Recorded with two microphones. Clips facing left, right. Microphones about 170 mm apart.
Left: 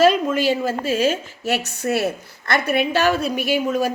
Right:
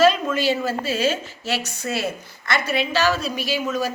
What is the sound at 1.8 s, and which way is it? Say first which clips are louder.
A woman's voice: left 5 dB; 60° left (ahead or behind).